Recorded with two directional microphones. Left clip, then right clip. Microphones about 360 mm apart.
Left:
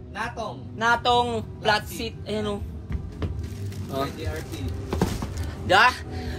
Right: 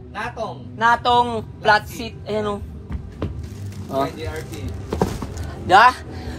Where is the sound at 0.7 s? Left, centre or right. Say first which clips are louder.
Right 5 dB; centre.